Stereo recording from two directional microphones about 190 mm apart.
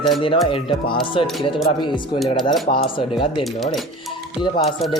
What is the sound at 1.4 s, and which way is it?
Speech, 25° left (ahead or behind).